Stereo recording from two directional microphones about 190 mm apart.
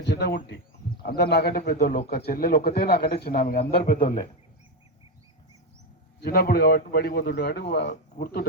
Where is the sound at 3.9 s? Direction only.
25° left (ahead or behind).